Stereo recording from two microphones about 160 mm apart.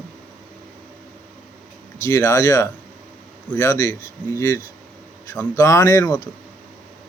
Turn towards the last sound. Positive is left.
turn(degrees=20)  # may be behind; listen again after turning